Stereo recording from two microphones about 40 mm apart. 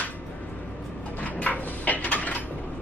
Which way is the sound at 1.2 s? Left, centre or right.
Left.